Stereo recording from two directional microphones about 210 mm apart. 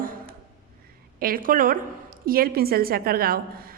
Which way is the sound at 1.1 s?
45° right (ahead or behind).